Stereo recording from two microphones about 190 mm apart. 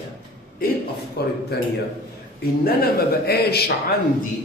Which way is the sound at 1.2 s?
55° left (ahead or behind).